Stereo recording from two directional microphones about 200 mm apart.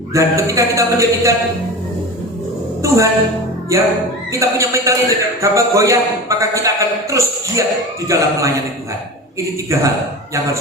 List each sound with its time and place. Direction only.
0.1 s a man's voice: 15° right (ahead or behind)
2.8 s a woman's voice: 15° right (ahead or behind)